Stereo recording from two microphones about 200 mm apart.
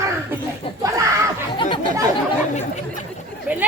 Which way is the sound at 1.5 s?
25° left (ahead or behind).